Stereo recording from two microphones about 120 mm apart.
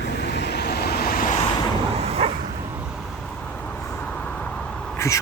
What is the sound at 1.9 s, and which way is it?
Bow-wow, 60° right (ahead or behind).